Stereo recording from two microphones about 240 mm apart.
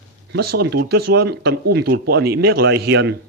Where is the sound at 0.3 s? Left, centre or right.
Right.